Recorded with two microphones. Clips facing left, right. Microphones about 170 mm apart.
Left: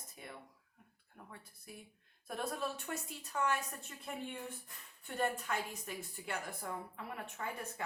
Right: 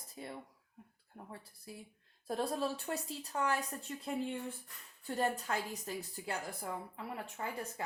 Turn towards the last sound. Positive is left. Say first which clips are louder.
# right 2 dB
turn(degrees=-25)  # may be behind; listen again after turning